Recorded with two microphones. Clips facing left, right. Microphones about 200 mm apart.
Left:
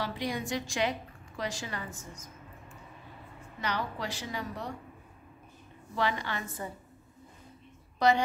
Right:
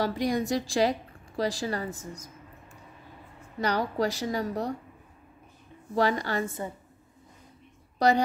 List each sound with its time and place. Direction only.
0.0 s a woman's voice: 40° right (ahead or behind)
3.6 s a woman's voice: 40° right (ahead or behind)
5.9 s a woman's voice: 40° right (ahead or behind)
8.0 s a woman's voice: 40° right (ahead or behind)